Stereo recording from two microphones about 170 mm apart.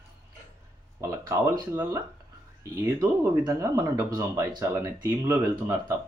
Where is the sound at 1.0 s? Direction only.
20° right (ahead or behind).